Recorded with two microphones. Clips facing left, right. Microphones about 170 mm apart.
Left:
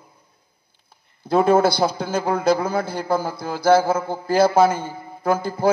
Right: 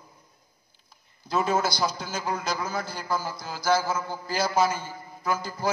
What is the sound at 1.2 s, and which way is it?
A man's voice, 55° left (ahead or behind).